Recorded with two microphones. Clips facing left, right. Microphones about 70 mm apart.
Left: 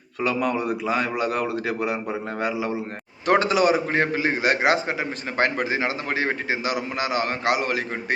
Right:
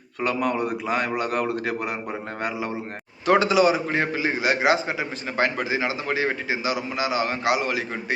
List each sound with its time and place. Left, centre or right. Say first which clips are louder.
0.3 s a man's voice: even; right
3.2 s a man's voice: right 1 dB; left